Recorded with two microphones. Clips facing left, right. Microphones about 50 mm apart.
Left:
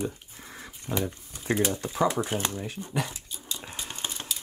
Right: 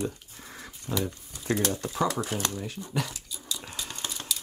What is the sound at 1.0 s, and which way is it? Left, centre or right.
Speech, left.